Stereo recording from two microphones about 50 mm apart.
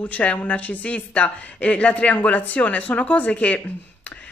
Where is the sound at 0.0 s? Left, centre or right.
Left.